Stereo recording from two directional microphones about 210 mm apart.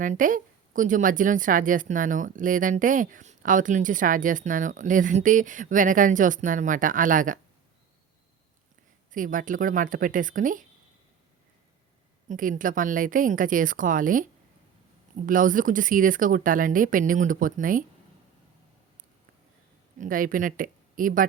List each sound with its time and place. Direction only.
0.0 s a woman's voice: 40° right (ahead or behind)
9.1 s a woman's voice: 40° right (ahead or behind)
12.3 s a woman's voice: 40° right (ahead or behind)
20.0 s speech: 40° right (ahead or behind)